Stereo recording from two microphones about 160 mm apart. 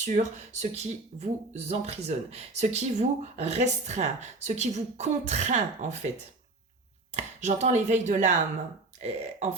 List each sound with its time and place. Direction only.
0.0 s speech: 50° right (ahead or behind)
7.1 s speech: 45° right (ahead or behind)